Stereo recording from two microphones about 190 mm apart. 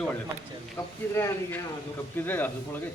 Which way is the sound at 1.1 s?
10° left (ahead or behind).